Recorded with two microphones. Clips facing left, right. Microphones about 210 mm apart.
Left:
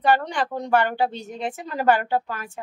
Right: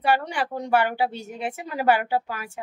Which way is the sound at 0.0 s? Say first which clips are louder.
Left 2 dB; 10° right (ahead or behind).